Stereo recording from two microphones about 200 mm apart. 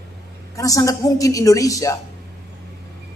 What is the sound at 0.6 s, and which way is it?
Speech, 15° left (ahead or behind).